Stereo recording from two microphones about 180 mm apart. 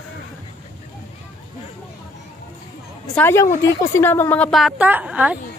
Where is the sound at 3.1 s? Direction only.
10° left (ahead or behind); by 5.4 s 5° right (ahead or behind).